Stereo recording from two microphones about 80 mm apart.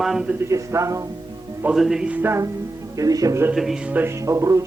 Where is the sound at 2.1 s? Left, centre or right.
Right.